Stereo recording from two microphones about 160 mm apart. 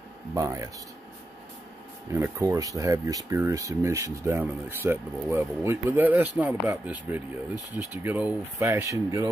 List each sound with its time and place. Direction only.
0.3 s speech: 20° right (ahead or behind)
2.1 s speech: 15° right (ahead or behind)